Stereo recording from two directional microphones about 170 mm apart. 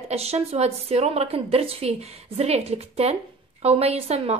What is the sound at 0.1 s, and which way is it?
A woman's voice, 35° right (ahead or behind).